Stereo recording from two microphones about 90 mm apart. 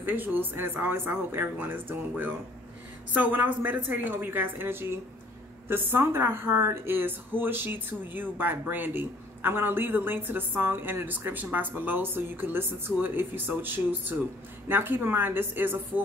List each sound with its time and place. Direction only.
0.0 s a woman's voice: 20° right (ahead or behind)